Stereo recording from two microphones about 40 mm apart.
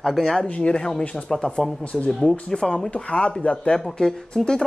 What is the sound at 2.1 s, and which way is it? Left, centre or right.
Speech, centre.